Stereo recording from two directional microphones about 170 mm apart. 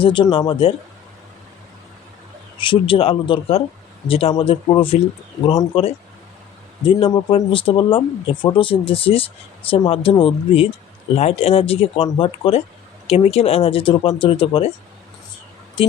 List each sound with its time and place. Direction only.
0.0 s speech: 30° left (ahead or behind)
2.6 s speech: 30° left (ahead or behind)
15.8 s speech: 30° left (ahead or behind)